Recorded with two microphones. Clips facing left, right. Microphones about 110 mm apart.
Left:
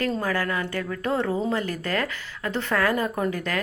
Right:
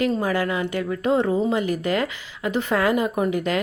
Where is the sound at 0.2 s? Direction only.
15° right (ahead or behind).